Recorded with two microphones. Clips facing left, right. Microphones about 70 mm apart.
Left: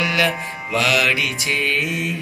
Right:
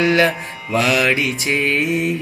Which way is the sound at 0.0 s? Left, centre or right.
Right.